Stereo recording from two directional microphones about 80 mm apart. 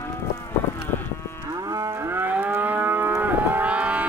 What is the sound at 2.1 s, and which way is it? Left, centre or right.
Moo, right.